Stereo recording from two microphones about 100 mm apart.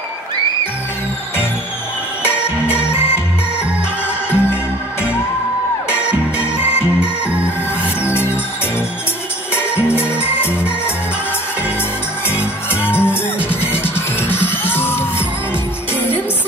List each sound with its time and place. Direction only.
4.3 s music: 25° left (ahead or behind)
5.9 s music: 10° right (ahead or behind)
9.9 s music: 15° right (ahead or behind)
12.3 s music: 20° left (ahead or behind)